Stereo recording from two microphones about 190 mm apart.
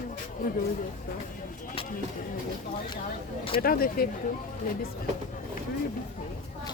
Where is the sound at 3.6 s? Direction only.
50° left (ahead or behind).